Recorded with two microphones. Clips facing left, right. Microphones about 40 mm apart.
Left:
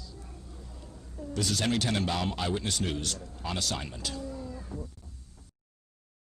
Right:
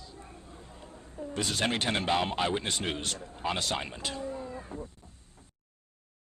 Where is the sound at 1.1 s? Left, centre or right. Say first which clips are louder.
Left 1 dB; right.